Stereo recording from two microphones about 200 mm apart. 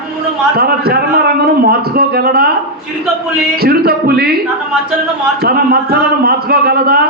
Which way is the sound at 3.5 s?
50° right (ahead or behind).